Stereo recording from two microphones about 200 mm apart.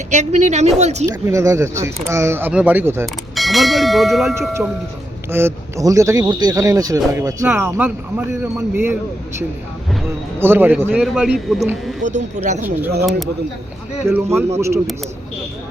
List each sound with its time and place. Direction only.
0.1 s a woman's voice: 35° right (ahead or behind)
1.0 s speech: 15° right (ahead or behind)
3.3 s speech: centre (ahead or behind)
4.4 s speech: 15° right (ahead or behind)
10.4 s speech: 10° right (ahead or behind)
12.0 s a woman's voice: 35° right (ahead or behind)
14.0 s speech: 10° right (ahead or behind)